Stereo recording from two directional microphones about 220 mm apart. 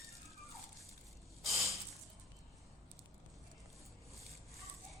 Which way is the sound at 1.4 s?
Centre (ahead or behind).